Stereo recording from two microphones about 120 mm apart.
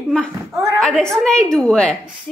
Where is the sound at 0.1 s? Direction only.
Centre (ahead or behind).